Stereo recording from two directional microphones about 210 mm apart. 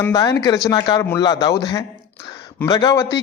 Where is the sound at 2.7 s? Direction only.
15° left (ahead or behind).